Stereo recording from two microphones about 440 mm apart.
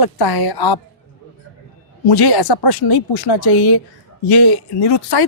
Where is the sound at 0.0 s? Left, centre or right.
Left.